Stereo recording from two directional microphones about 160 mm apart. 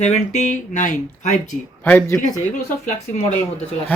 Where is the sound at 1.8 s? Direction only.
15° left (ahead or behind).